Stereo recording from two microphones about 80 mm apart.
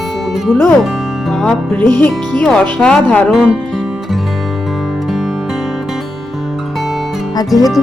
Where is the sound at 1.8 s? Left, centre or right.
Left.